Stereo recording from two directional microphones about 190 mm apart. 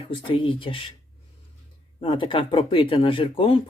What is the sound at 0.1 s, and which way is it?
Speech, 30° left (ahead or behind).